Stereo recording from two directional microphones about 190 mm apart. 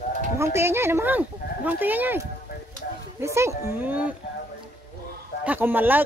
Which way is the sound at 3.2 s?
15° right (ahead or behind).